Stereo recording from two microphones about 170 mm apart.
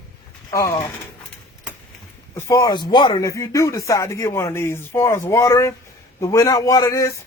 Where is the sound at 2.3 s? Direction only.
20° left (ahead or behind).